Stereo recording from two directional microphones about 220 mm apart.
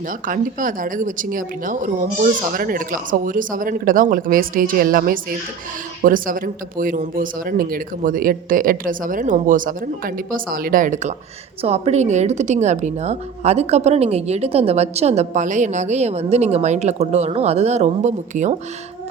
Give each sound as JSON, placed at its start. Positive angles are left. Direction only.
{"t": 0.3, "sound": "speech", "side_deg": -40}